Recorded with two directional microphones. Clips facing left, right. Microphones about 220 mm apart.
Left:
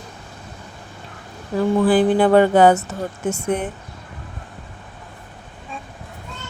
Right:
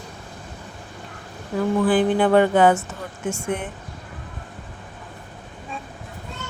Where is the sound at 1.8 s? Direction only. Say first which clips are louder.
Left 3 dB; 35° left (ahead or behind).